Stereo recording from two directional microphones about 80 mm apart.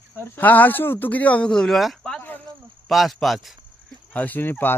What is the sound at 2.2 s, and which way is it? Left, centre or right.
Cricket, left.